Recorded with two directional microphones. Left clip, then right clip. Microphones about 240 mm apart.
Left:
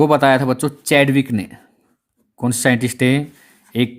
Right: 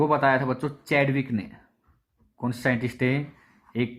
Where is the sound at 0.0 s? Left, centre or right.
Left.